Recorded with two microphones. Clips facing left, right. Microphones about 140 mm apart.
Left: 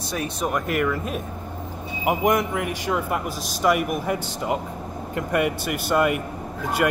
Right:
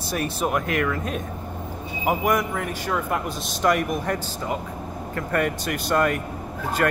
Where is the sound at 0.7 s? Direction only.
10° left (ahead or behind).